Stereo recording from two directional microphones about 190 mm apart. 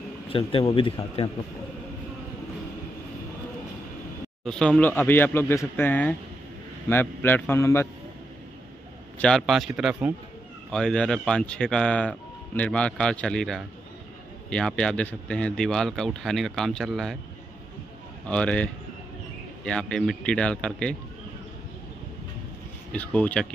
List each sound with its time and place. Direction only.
0.3 s a man's voice: 30° left (ahead or behind)
4.5 s speech: 5° left (ahead or behind)
9.2 s speech: centre (ahead or behind)
18.3 s speech: 5° left (ahead or behind)
22.9 s speech: 5° left (ahead or behind)